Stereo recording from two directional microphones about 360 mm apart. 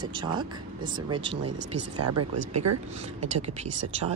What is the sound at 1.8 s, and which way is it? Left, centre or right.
Speech, right.